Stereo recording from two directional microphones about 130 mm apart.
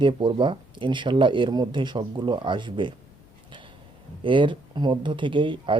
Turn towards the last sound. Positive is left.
turn(degrees=-40)  # may be behind; listen again after turning